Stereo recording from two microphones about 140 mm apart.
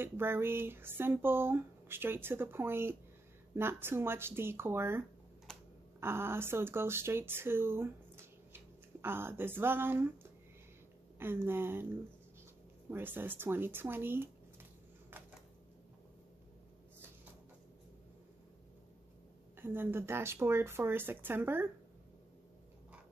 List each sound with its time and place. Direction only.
0.0 s speech: 15° right (ahead or behind)
5.5 s typing: 5° left (ahead or behind)
5.9 s speech: 15° right (ahead or behind)
11.1 s speech: 15° right (ahead or behind)
12.9 s speech: 15° right (ahead or behind)
19.5 s speech: 15° right (ahead or behind)